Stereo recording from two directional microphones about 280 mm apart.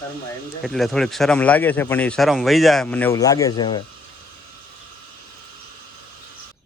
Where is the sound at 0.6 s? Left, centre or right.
Centre.